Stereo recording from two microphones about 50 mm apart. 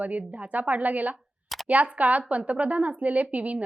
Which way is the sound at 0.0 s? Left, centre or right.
Right.